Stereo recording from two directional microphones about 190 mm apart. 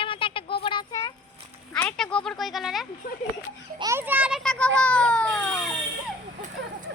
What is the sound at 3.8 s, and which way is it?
A child's voice, 15° right (ahead or behind).